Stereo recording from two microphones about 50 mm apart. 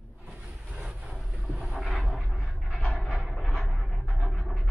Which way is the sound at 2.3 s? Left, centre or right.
Centre.